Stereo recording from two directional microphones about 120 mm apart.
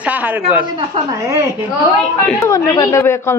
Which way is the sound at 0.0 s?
15° right (ahead or behind).